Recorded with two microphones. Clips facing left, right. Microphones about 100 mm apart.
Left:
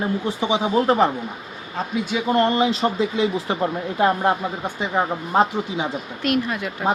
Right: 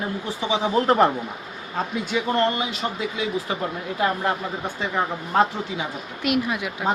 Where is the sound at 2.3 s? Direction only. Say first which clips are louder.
Left 7 dB; 25° left (ahead or behind).